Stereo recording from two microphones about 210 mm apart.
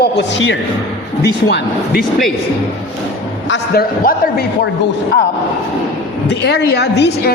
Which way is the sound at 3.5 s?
45° left (ahead or behind).